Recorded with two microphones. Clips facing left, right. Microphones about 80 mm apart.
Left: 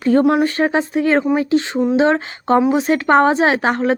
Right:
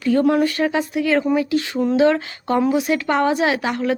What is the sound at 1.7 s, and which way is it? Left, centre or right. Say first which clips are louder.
Speech: even; left.